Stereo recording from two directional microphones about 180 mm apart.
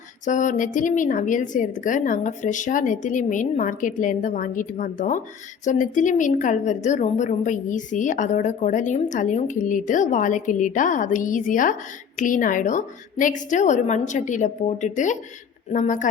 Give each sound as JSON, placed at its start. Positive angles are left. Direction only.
{"t": 0.3, "sound": "a woman's voice", "side_deg": 45}